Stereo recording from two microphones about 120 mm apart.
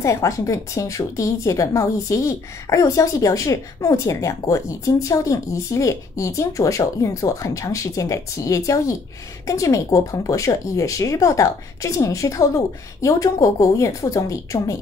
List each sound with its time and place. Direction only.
0.0 s a woman's voice: 25° left (ahead or behind)